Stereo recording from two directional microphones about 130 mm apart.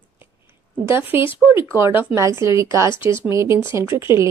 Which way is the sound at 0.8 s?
20° right (ahead or behind).